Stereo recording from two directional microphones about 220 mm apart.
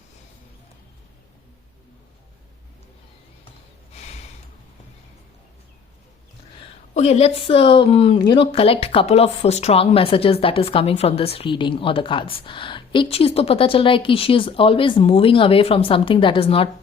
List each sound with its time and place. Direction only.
3.9 s snort: 30° left (ahead or behind)
6.9 s speech: 30° left (ahead or behind)